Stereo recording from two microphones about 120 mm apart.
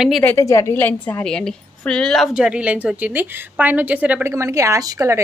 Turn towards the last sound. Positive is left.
turn(degrees=-25)  # may be behind; listen again after turning